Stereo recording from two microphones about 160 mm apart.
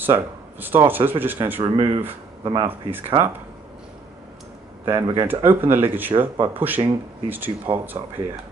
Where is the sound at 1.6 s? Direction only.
30° right (ahead or behind).